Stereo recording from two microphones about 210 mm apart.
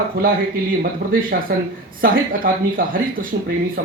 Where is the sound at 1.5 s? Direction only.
45° right (ahead or behind).